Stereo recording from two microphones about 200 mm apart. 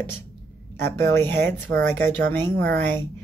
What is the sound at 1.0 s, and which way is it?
Speech, 10° left (ahead or behind).